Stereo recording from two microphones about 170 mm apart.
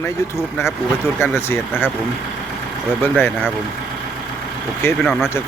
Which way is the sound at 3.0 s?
10° left (ahead or behind).